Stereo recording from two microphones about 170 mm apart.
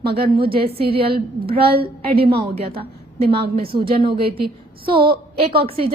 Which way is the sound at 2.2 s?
35° right (ahead or behind).